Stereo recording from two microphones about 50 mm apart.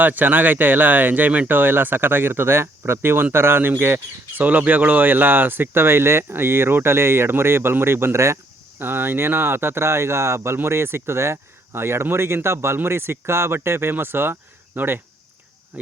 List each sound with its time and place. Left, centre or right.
0.0 s speech: right
4.4 s speech: right
8.8 s speech: right